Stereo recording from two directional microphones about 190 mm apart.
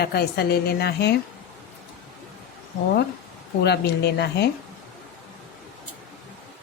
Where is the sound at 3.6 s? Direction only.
60° left (ahead or behind).